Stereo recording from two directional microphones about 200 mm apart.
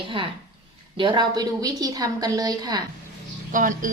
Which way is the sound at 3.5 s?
40° right (ahead or behind).